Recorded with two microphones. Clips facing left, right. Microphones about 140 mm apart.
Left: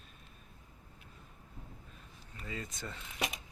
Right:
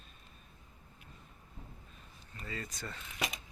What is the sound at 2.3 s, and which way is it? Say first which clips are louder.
Speech: even; 10° left (ahead or behind).